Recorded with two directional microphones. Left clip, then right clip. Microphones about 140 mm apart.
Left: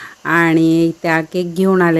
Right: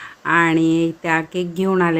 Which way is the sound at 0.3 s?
50° left (ahead or behind).